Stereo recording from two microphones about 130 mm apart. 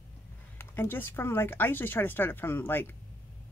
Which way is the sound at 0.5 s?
15° left (ahead or behind).